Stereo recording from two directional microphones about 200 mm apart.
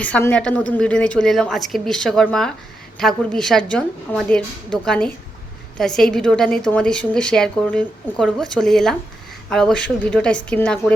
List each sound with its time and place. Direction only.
0.0 s a woman's voice: 5° left (ahead or behind)